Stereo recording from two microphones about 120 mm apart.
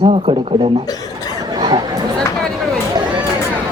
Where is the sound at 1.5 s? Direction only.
40° right (ahead or behind).